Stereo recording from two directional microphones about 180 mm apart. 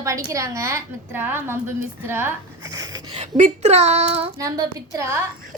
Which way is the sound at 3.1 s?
40° right (ahead or behind).